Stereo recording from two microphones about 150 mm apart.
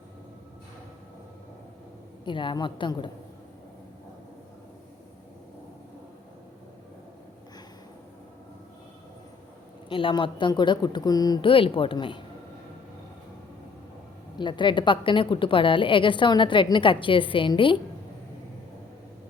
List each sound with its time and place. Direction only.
2.2 s a woman's voice: 35° left (ahead or behind)
9.9 s a woman's voice: 35° left (ahead or behind)
14.3 s a woman's voice: 30° left (ahead or behind)